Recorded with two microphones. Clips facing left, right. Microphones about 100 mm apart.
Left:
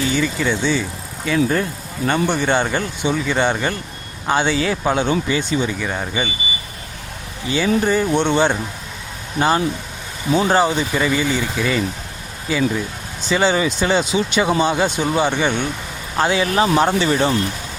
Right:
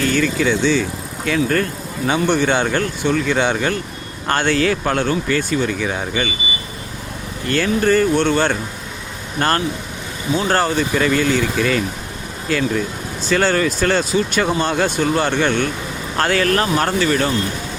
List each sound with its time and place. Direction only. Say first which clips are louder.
0.1 s speech: right 2 dB; 5° left (ahead or behind); by 5.6 s 20° left (ahead or behind)
5.6 s speech: right 2 dB; centre (ahead or behind)
7.4 s speech: right 1 dB; 5° left (ahead or behind)
9.4 s speech: left 1 dB; 5° left (ahead or behind)